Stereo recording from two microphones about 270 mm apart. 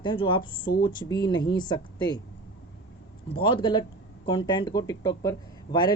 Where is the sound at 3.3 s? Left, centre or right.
Centre.